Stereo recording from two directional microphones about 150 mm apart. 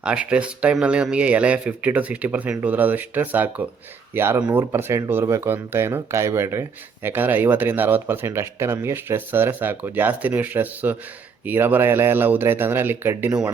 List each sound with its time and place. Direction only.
0.0 s speech: 5° right (ahead or behind)